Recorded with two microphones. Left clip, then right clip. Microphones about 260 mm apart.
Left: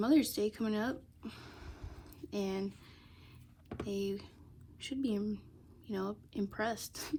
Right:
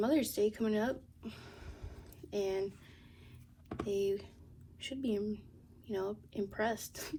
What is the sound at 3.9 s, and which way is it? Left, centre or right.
A woman's voice, left.